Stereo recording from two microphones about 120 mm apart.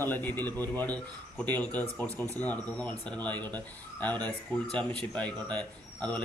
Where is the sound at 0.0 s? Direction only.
15° left (ahead or behind).